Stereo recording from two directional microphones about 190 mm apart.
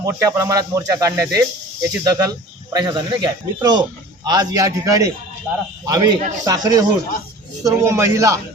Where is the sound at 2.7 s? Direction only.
25° right (ahead or behind).